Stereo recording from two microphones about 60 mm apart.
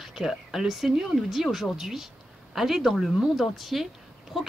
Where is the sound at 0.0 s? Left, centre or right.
Centre.